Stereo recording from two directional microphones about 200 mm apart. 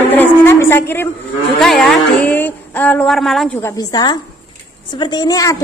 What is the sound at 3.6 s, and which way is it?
Speech, 20° left (ahead or behind).